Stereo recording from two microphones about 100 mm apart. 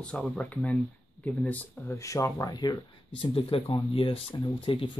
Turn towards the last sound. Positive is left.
turn(degrees=60)  # may be behind; listen again after turning